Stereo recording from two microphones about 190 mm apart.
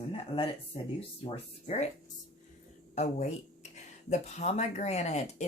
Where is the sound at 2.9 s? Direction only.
35° left (ahead or behind).